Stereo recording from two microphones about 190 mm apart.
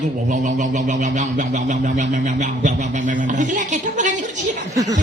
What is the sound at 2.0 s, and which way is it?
A man's voice, 40° right (ahead or behind).